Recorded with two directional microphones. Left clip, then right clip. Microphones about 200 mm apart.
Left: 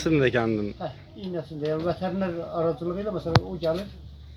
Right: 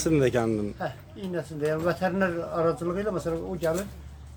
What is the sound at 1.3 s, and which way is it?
Speech, 35° right (ahead or behind).